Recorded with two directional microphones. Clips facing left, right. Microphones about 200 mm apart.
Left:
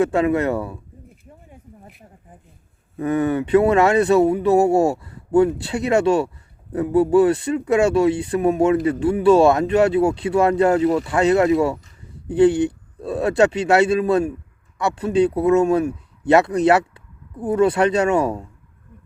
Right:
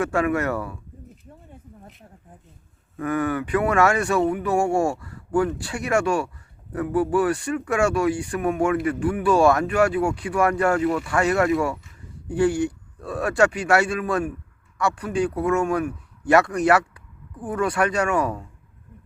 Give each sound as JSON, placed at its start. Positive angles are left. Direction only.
{"t": 0.0, "sound": "speech", "side_deg": 20}
{"t": 1.2, "sound": "a sound", "side_deg": 10}
{"t": 3.0, "sound": "speech", "side_deg": 25}